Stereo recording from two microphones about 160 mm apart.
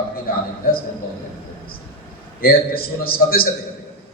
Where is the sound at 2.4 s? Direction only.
70° left (ahead or behind).